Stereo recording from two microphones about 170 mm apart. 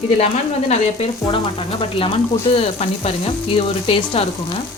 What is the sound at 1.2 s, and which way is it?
Speech, 30° left (ahead or behind).